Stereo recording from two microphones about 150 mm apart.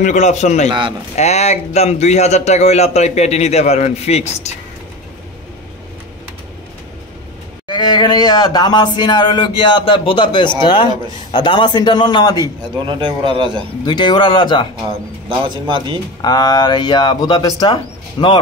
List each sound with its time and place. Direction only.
0.0 s speech: 50° left (ahead or behind)
0.7 s a man's voice: 35° right (ahead or behind)
1.1 s speech: 45° left (ahead or behind)
7.6 s speech: 30° left (ahead or behind)
12.8 s a man's voice: 30° right (ahead or behind)
13.8 s speech: 30° left (ahead or behind)
15.2 s a man's voice: 35° right (ahead or behind)
16.2 s speech: 25° left (ahead or behind)